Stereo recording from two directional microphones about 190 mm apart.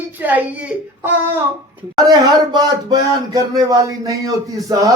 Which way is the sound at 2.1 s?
20° right (ahead or behind).